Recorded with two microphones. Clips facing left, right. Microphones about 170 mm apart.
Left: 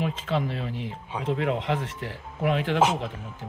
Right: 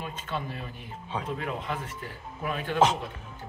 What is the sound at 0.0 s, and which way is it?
Speech, 90° left.